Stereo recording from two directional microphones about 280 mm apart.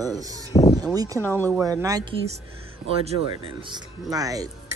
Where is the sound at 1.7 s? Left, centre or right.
Centre.